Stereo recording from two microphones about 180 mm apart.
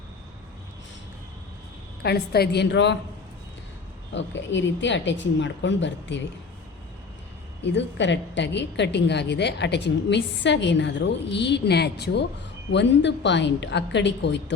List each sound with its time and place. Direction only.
2.0 s a woman's voice: 60° left (ahead or behind)
4.1 s speech: 90° left
7.6 s a woman's voice: 75° left (ahead or behind)
12.7 s a woman's voice: 75° left (ahead or behind)